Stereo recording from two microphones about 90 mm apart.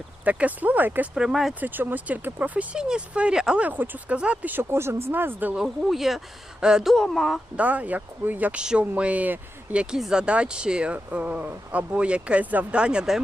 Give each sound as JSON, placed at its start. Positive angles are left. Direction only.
{"t": 0.3, "sound": "speech", "side_deg": -15}
{"t": 1.1, "sound": "speech", "side_deg": -5}
{"t": 1.6, "sound": "speech", "side_deg": -20}
{"t": 5.5, "sound": "speech", "side_deg": -5}
{"t": 6.9, "sound": "speech", "side_deg": 5}
{"t": 7.5, "sound": "speech", "side_deg": -15}
{"t": 9.9, "sound": "speech", "side_deg": -5}